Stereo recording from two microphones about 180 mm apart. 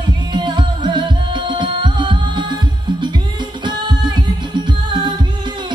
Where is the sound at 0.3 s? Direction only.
25° right (ahead or behind).